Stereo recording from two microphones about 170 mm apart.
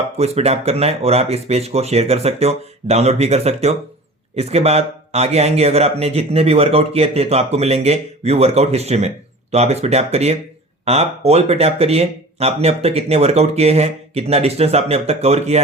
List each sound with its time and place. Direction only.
0.2 s speech: 40° right (ahead or behind)